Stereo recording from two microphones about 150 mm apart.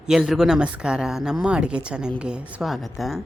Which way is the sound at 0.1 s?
5° right (ahead or behind).